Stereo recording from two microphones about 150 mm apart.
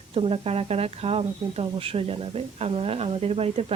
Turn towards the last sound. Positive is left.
turn(degrees=-40)  # may be behind; listen again after turning